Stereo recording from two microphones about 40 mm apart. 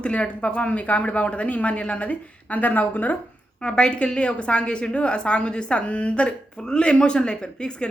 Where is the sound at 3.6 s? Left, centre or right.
Left.